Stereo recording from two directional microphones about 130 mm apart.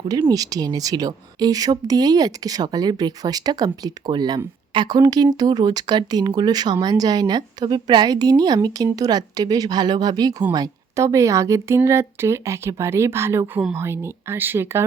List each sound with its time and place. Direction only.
0.1 s speech: 30° right (ahead or behind)